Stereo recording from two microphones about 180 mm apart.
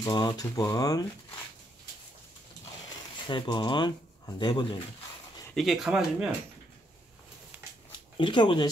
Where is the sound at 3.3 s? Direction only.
25° left (ahead or behind).